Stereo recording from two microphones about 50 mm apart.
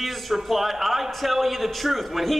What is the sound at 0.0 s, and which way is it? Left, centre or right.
A man's voice, centre.